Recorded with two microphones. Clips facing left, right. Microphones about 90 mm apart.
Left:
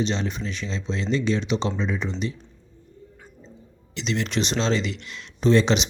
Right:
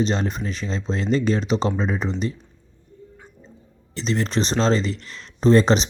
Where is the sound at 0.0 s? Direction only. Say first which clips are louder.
Right 3 dB; 40° right (ahead or behind).